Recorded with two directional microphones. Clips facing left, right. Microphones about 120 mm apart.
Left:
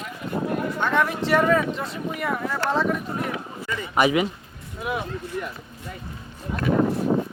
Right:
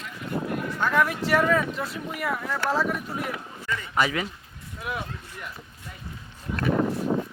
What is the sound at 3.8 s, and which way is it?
Speech, 15° left (ahead or behind).